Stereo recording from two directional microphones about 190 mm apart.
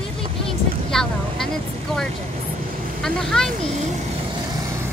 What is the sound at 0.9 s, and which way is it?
Vehicle, 5° left (ahead or behind).